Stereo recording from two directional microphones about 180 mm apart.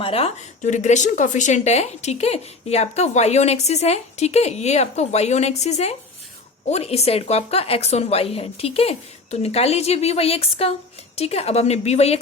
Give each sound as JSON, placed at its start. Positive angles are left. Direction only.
{"t": 0.0, "sound": "a woman's voice", "side_deg": 30}